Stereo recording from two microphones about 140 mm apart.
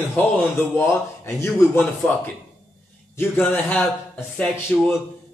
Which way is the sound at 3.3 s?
10° left (ahead or behind).